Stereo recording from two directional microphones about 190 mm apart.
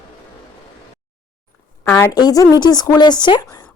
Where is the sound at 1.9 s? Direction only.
15° left (ahead or behind).